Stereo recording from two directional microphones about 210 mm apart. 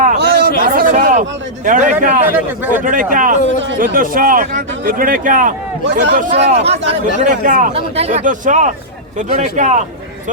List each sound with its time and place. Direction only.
0.0 s a sound: 45° right (ahead or behind)
1.6 s speech: 40° right (ahead or behind)
2.2 s speech: 10° right (ahead or behind)
2.8 s speech: 40° right (ahead or behind)